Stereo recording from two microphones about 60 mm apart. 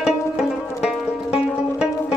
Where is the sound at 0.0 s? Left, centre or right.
Centre.